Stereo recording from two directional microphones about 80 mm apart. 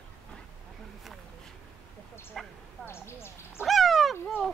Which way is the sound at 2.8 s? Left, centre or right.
Left.